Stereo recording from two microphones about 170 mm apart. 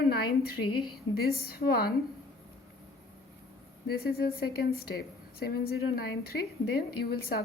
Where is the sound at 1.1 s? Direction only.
65° left (ahead or behind).